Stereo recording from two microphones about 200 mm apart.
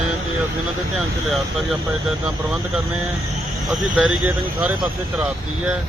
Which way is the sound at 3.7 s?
5° right (ahead or behind).